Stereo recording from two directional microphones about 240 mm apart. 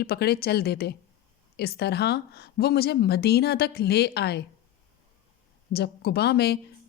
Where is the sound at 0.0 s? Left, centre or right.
Left.